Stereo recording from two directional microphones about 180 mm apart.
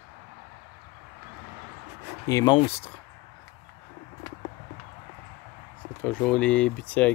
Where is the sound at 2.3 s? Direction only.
25° left (ahead or behind).